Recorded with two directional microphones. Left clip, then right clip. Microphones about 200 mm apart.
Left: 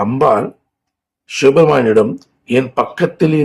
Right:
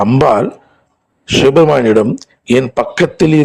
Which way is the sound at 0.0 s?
45° right (ahead or behind).